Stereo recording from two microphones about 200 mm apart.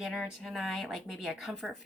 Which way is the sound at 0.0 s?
Centre (ahead or behind).